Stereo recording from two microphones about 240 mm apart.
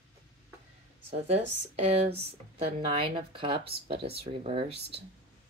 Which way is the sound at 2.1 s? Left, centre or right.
Right.